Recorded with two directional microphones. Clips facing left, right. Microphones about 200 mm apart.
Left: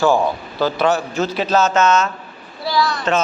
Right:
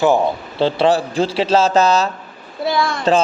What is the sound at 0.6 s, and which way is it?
A man's voice, 30° right (ahead or behind).